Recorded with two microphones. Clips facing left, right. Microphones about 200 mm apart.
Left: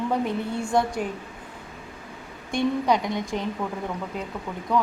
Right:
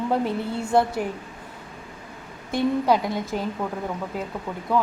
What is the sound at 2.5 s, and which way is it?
A woman's voice, 5° right (ahead or behind).